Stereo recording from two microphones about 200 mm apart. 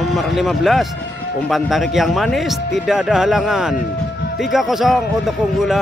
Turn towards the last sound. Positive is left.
turn(degrees=0)  # may be behind; listen again after turning